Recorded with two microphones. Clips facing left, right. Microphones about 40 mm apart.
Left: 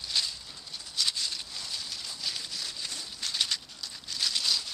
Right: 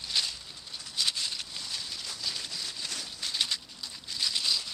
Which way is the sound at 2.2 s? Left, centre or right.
Centre.